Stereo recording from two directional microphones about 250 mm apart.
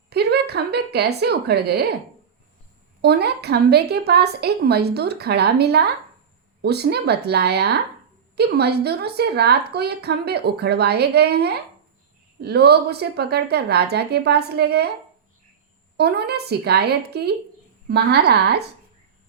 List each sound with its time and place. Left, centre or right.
0.1 s a woman's voice: right
3.0 s a woman's voice: right
16.0 s a woman's voice: right